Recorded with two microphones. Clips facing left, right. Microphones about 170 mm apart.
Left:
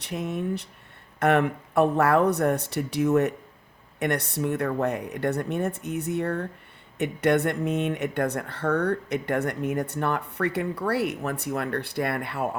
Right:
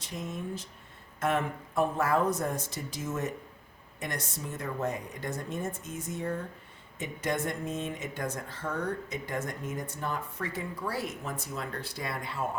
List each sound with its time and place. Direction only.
0.0 s speech: 65° left (ahead or behind)